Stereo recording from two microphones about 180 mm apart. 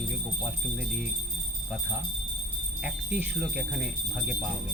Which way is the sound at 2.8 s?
5° right (ahead or behind).